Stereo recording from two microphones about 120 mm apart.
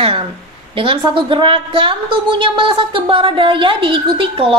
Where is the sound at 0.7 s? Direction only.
45° right (ahead or behind).